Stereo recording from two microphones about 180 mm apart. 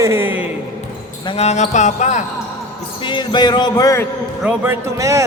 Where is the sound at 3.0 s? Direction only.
25° left (ahead or behind).